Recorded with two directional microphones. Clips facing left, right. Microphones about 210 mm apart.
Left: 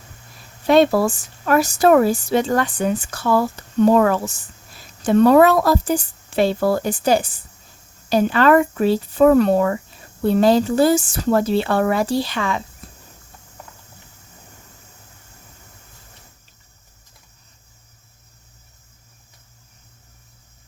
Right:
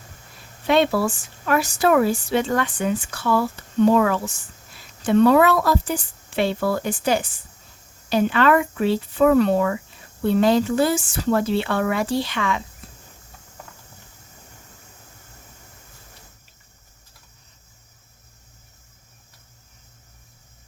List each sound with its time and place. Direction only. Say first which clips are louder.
0.7 s speech: left 4 dB; 40° left (ahead or behind)